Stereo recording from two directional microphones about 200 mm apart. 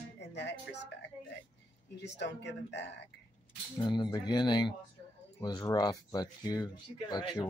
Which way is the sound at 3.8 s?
20° left (ahead or behind).